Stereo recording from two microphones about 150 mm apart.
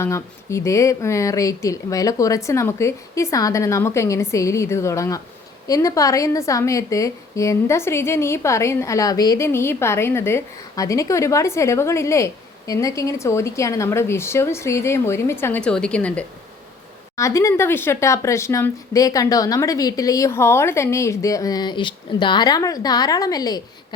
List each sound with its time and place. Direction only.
0.0 s a woman's voice: 20° left (ahead or behind)
17.2 s a woman's voice: 20° left (ahead or behind)